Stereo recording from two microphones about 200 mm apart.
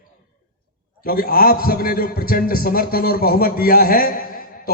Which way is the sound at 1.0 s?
45° left (ahead or behind).